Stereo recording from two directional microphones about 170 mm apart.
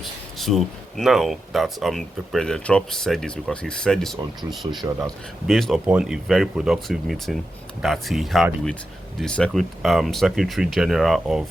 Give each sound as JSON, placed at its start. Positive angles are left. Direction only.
{"t": 0.0, "sound": "speech", "side_deg": 0}
{"t": 4.7, "sound": "speech", "side_deg": -25}
{"t": 5.5, "sound": "speech", "side_deg": 0}